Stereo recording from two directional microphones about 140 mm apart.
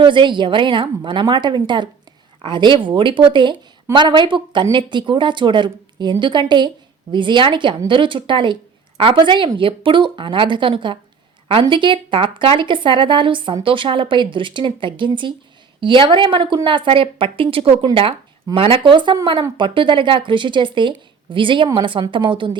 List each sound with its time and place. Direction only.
0.0 s a woman's voice: 35° right (ahead or behind)